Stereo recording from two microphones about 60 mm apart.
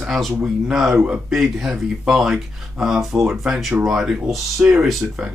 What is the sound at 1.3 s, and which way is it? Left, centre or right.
Speech, centre.